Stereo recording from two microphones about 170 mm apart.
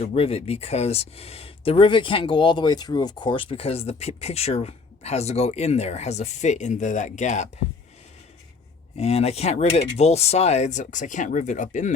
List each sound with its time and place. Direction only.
0.0 s speech: 35° left (ahead or behind)
9.0 s speech: 35° left (ahead or behind)